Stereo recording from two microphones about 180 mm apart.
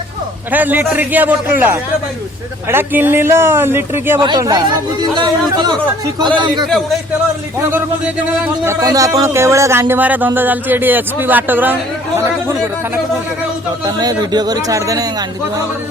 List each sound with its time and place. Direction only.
0.5 s speech: 10° right (ahead or behind); by 6.7 s 25° right (ahead or behind)
8.6 s speech: 15° right (ahead or behind)
13.8 s speech: 20° right (ahead or behind)